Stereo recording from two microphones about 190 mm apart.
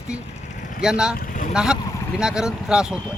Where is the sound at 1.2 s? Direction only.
45° left (ahead or behind).